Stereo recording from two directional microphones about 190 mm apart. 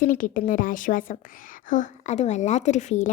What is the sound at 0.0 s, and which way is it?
A woman's voice, 45° left (ahead or behind).